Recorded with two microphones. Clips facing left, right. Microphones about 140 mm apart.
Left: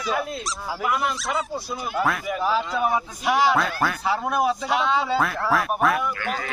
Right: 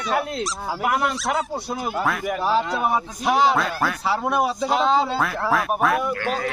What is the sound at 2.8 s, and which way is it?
Speech, 30° right (ahead or behind).